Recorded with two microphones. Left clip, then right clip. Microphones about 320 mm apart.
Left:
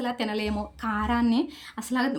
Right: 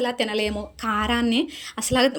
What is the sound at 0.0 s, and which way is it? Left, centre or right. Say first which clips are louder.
Speech: right 6 dB; centre.